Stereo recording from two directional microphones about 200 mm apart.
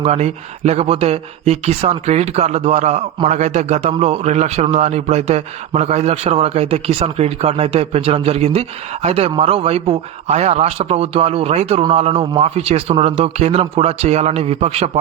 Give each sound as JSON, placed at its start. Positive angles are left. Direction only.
{"t": 0.0, "sound": "speech", "side_deg": -30}